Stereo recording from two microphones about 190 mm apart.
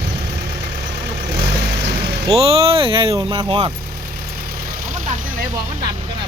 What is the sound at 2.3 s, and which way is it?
Speech, 30° right (ahead or behind).